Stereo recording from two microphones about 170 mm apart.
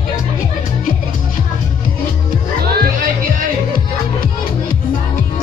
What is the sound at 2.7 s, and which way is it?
Music, 65° right (ahead or behind).